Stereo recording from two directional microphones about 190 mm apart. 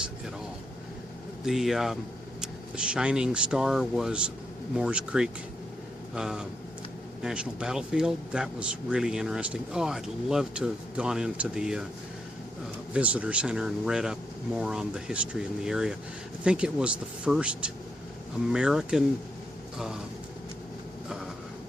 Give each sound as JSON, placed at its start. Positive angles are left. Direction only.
{"t": 1.5, "sound": "speech", "side_deg": 0}
{"t": 12.9, "sound": "speech", "side_deg": -5}